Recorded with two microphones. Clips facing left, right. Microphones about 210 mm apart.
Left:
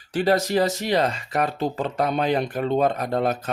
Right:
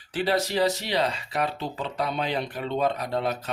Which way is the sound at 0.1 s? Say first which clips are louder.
Left 5 dB; 45° left (ahead or behind).